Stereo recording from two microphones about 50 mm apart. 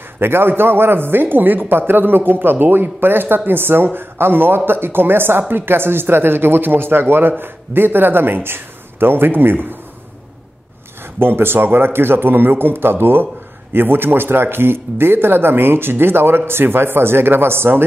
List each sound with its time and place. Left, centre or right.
0.2 s speech: right
11.1 s speech: right